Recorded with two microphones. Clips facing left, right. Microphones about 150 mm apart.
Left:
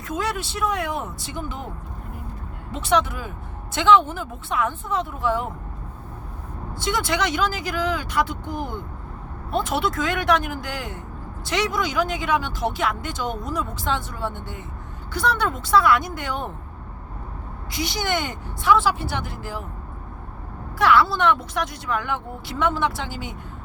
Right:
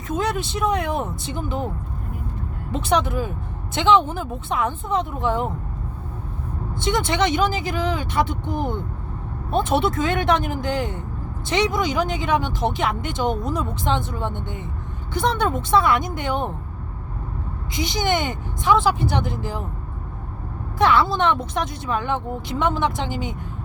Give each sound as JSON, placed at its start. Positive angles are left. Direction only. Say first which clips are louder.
{"t": 0.1, "sound": "speech", "louder": "right 3 dB", "side_deg": -20}
{"t": 2.9, "sound": "speech", "louder": "even", "side_deg": -20}
{"t": 6.7, "sound": "speech", "louder": "right 3 dB", "side_deg": -25}
{"t": 17.7, "sound": "speech", "louder": "right 3 dB", "side_deg": -20}
{"t": 20.7, "sound": "speech", "louder": "even", "side_deg": -20}